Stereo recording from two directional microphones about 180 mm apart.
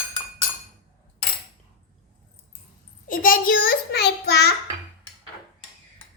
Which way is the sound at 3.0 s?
50° left (ahead or behind).